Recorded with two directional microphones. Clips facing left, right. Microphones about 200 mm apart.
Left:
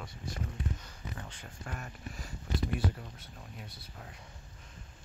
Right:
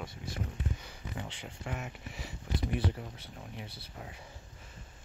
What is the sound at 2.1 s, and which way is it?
Speech, 70° right (ahead or behind).